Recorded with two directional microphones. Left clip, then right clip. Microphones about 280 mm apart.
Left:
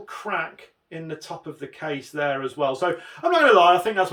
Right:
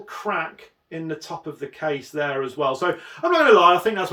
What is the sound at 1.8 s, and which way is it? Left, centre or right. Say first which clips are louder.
Speech: right 2 dB; centre.